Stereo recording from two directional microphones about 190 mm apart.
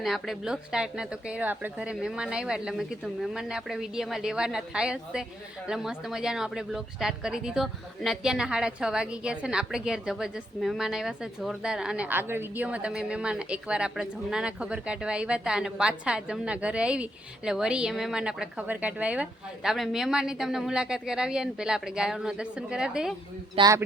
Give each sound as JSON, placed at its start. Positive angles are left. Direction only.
{"t": 0.0, "sound": "a woman's voice", "side_deg": 0}
{"t": 23.6, "sound": "a man's voice", "side_deg": -20}